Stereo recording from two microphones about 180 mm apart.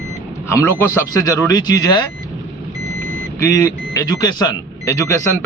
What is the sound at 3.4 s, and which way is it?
A man's voice, 20° left (ahead or behind).